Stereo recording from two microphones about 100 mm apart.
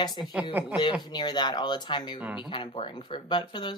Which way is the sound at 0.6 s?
20° right (ahead or behind).